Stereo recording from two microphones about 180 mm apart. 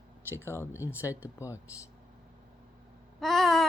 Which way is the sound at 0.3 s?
15° left (ahead or behind).